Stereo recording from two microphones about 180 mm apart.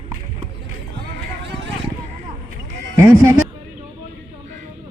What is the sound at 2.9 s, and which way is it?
Bleat, 15° right (ahead or behind).